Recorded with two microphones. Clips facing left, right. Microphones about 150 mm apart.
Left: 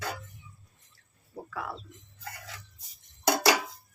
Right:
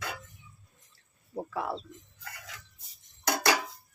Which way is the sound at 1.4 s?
25° right (ahead or behind).